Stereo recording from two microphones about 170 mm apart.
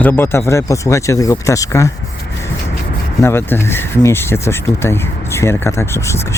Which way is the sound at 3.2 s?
15° left (ahead or behind).